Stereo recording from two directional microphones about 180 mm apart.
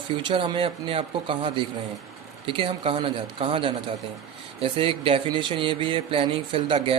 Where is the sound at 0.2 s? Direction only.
25° right (ahead or behind).